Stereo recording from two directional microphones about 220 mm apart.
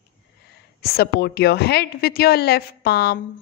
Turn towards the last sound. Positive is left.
turn(degrees=45)  # may be behind; listen again after turning